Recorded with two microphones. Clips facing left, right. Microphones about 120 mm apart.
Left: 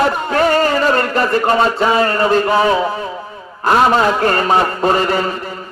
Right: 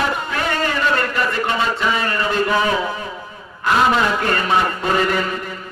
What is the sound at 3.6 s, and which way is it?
A man's voice, 40° left (ahead or behind).